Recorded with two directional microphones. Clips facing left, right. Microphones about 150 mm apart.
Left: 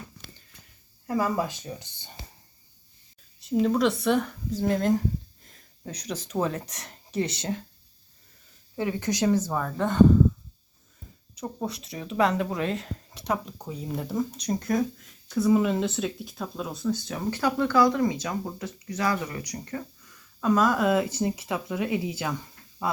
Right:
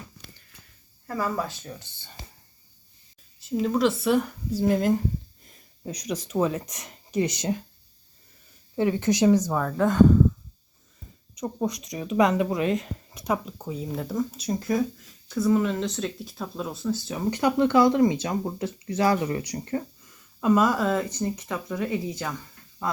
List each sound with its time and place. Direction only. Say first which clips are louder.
1.0 s speech: left 2 dB; 15° left (ahead or behind)
3.4 s speech: even; centre (ahead or behind)
8.7 s speech: right 5 dB; 20° right (ahead or behind)
9.5 s speech: right 4 dB; centre (ahead or behind)
11.3 s speech: right 4 dB; 10° right (ahead or behind)
15.5 s speech: left 1 dB; 10° left (ahead or behind)
17.3 s speech: right 3 dB; 20° right (ahead or behind)
20.4 s speech: right 2 dB; 10° right (ahead or behind)
20.7 s speech: left 2 dB; 5° left (ahead or behind)